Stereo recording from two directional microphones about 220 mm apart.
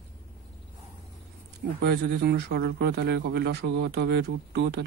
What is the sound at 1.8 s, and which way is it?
Speech, 45° right (ahead or behind).